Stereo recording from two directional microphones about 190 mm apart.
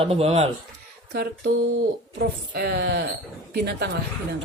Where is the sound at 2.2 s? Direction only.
55° right (ahead or behind).